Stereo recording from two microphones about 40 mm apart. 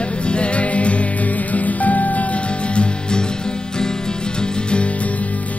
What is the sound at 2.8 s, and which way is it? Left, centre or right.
Music, left.